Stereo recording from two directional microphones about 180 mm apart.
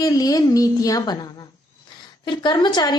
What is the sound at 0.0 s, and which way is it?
A woman's voice, 20° left (ahead or behind).